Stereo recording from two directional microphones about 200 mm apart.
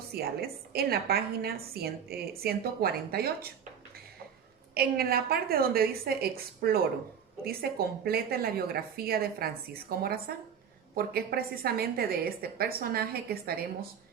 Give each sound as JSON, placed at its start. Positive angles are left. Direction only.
{"t": 0.1, "sound": "a woman's voice", "side_deg": -50}
{"t": 4.7, "sound": "a woman's voice", "side_deg": -50}